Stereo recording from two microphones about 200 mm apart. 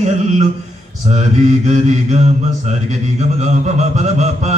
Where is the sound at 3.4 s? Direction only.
35° right (ahead or behind).